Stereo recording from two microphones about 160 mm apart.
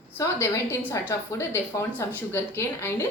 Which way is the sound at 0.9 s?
15° left (ahead or behind).